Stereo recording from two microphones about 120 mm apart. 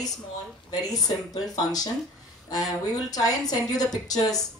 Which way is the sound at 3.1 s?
30° left (ahead or behind).